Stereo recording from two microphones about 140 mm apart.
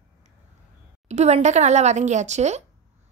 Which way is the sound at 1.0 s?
55° right (ahead or behind).